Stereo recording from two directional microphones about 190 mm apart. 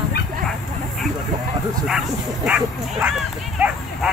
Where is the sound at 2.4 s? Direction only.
5° right (ahead or behind).